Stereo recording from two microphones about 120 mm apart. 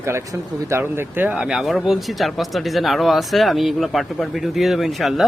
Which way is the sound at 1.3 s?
5° right (ahead or behind).